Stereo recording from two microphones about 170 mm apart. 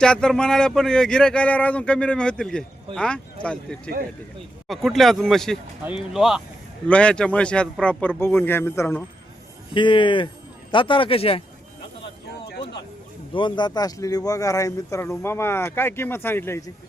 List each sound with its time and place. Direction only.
0.0 s a man's voice: 5° left (ahead or behind)
9.7 s speech: 30° left (ahead or behind)
13.3 s a man's voice: 25° left (ahead or behind)